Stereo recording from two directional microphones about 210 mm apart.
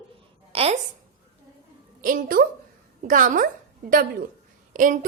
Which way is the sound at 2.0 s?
40° right (ahead or behind).